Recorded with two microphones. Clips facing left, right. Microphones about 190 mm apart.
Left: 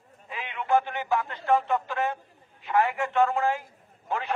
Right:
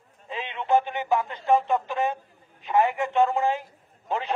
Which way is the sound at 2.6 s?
20° right (ahead or behind).